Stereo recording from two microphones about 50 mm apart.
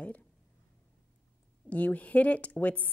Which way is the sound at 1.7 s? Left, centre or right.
Left.